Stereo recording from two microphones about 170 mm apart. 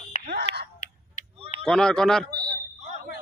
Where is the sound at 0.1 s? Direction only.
40° left (ahead or behind).